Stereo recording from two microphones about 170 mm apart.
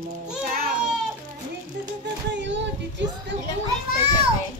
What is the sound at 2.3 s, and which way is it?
Child singing, 90° right.